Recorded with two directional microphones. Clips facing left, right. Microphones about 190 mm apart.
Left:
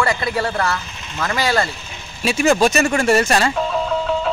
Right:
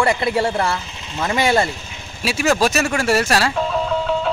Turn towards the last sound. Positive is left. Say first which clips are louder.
# even
turn(degrees=0)  # may be behind; listen again after turning